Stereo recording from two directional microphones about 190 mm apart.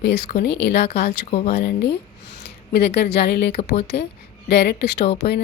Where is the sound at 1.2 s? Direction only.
35° left (ahead or behind).